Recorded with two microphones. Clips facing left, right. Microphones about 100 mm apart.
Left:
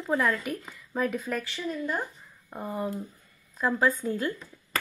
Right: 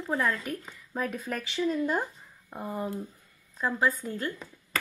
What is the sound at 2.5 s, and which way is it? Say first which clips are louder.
Speech: left 2 dB; centre (ahead or behind).